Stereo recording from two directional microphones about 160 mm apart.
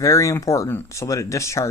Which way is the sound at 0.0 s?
20° left (ahead or behind).